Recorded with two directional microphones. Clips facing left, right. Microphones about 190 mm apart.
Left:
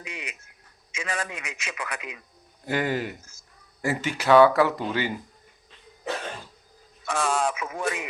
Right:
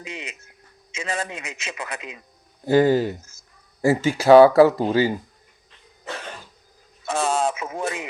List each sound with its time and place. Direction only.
0.0 s a sound: 25° right (ahead or behind)
0.9 s a man's voice: 25° right (ahead or behind)
7.0 s radio: 25° right (ahead or behind)